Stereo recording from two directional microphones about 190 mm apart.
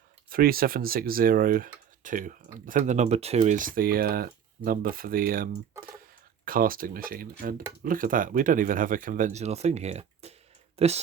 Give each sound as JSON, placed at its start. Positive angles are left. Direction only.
{"t": 0.3, "sound": "speech", "side_deg": -50}